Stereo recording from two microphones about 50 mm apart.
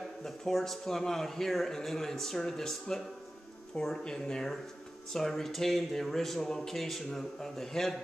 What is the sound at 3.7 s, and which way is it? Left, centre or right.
Speech, centre.